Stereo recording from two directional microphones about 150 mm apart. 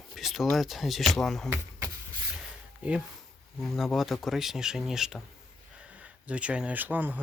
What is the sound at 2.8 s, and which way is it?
Speech, 10° right (ahead or behind).